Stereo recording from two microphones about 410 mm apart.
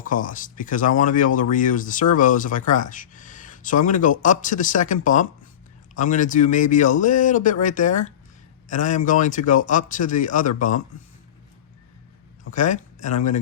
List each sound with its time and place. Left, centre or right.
0.0 s speech: centre
12.5 s speech: centre